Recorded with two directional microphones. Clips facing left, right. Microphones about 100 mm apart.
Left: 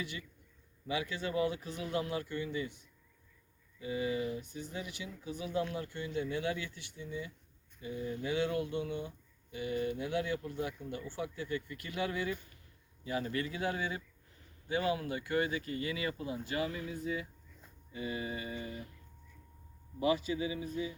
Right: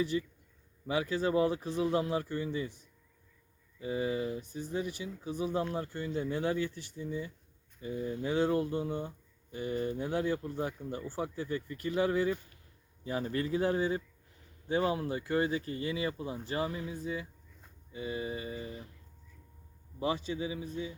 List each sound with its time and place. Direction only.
0.0 s speech: 35° right (ahead or behind)
16.6 s music: 20° right (ahead or behind)
20.0 s speech: 30° right (ahead or behind)